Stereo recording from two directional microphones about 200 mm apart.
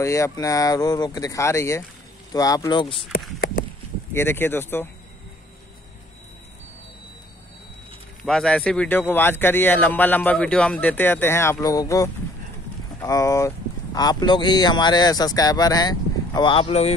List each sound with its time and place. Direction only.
0.0 s a man's voice: 15° left (ahead or behind)
3.1 s a sound: 45° left (ahead or behind)
4.1 s a man's voice: 10° left (ahead or behind)
8.3 s a man's voice: 5° left (ahead or behind); by 16.9 s 30° left (ahead or behind)